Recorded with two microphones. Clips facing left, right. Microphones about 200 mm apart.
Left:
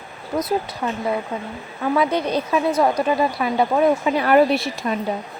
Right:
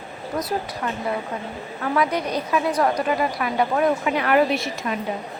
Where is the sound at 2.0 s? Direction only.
25° left (ahead or behind).